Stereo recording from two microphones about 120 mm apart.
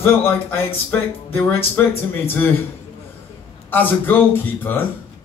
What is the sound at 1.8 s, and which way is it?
Speech, 15° left (ahead or behind).